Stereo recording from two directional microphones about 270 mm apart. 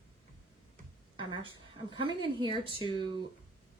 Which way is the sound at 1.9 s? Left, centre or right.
Centre.